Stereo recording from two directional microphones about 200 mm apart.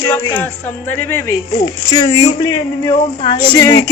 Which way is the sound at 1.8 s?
25° left (ahead or behind).